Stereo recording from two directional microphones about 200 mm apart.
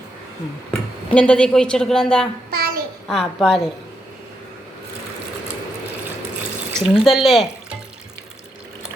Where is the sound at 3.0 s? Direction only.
Centre (ahead or behind).